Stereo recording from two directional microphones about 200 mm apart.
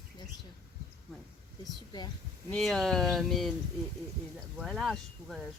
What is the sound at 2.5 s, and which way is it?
Speech, centre (ahead or behind).